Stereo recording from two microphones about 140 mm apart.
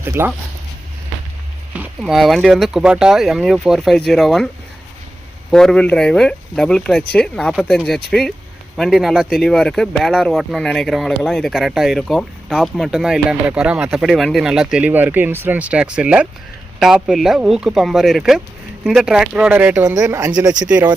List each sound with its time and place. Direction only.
0.0 s speech: 15° right (ahead or behind)
2.0 s speech: centre (ahead or behind)
5.5 s speech: 5° left (ahead or behind)
19.8 s speech: 20° right (ahead or behind)